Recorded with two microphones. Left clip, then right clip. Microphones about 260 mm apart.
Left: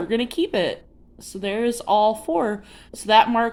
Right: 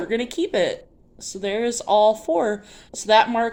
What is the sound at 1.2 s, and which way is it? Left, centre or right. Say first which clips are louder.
Speech: even; left.